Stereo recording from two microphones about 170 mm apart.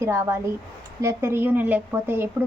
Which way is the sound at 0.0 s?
15° right (ahead or behind).